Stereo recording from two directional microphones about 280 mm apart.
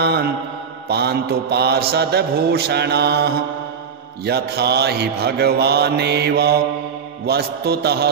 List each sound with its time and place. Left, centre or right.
0.0 s mantra: right